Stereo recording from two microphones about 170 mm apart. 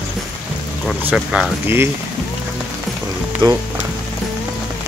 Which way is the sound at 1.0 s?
5° right (ahead or behind).